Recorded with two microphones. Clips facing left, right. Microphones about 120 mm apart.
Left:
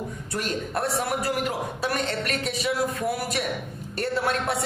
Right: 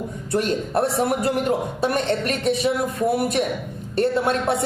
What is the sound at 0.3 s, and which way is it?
A man's voice, 25° right (ahead or behind).